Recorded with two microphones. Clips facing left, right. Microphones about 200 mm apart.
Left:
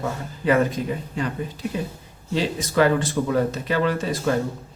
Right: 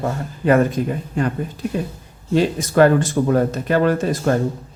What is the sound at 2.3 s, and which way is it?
Speech, 50° right (ahead or behind).